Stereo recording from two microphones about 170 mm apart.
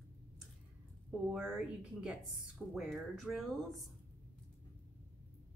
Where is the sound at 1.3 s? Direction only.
5° right (ahead or behind).